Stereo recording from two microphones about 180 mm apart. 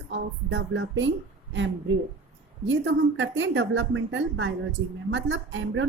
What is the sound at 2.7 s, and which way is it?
A woman's voice, 90° right.